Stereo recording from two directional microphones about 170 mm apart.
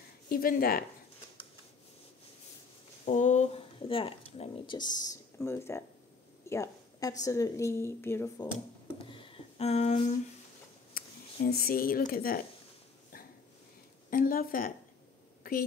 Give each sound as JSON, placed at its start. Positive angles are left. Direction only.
{"t": 0.3, "sound": "a woman's voice", "side_deg": 60}
{"t": 3.1, "sound": "a woman's voice", "side_deg": 45}
{"t": 8.4, "sound": "a sound", "side_deg": 30}
{"t": 11.0, "sound": "speech", "side_deg": 60}
{"t": 14.1, "sound": "a woman's voice", "side_deg": 55}
{"t": 15.5, "sound": "a sound", "side_deg": 55}